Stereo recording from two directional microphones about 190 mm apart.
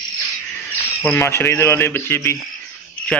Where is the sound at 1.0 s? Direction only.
10° left (ahead or behind).